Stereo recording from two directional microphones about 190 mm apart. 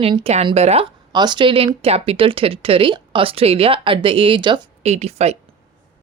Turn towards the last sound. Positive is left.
turn(degrees=-35)  # may be behind; listen again after turning